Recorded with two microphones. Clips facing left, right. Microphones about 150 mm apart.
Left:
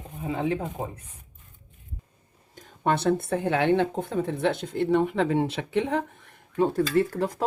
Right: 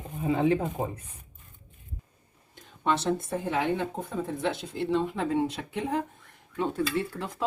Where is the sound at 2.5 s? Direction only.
50° left (ahead or behind); by 6.0 s 75° left (ahead or behind).